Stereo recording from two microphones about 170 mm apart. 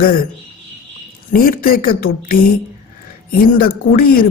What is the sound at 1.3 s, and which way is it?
Speech, 60° left (ahead or behind).